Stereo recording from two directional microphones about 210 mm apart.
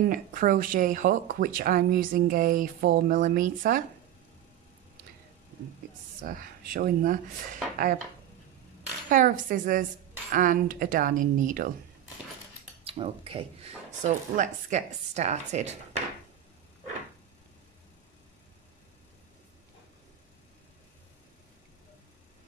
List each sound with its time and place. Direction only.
0.0 s speech: 40° right (ahead or behind)
6.2 s speech: 40° right (ahead or behind)
9.1 s speech: 40° right (ahead or behind)
12.8 s speech: 25° right (ahead or behind)